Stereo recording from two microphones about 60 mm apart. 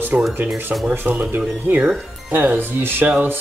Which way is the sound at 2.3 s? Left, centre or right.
Right.